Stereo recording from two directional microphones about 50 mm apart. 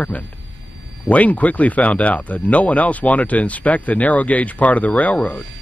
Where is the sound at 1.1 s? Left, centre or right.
Left.